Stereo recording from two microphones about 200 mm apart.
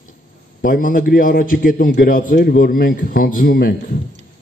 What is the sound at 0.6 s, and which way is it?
A man's voice, 45° left (ahead or behind).